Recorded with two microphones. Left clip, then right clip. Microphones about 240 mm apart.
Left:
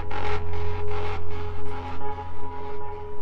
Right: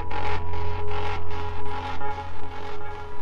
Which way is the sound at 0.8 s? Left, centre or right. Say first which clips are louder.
Right 1 dB; centre.